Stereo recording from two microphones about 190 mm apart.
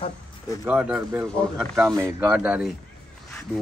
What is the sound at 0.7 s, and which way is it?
A man's voice, 5° right (ahead or behind).